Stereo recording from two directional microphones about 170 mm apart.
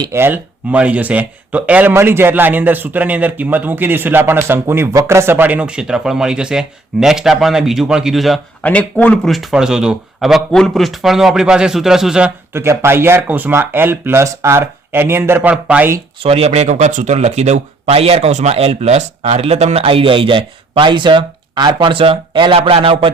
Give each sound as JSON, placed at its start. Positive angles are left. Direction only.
{"t": 0.0, "sound": "speech", "side_deg": -15}
{"t": 16.2, "sound": "speech", "side_deg": -35}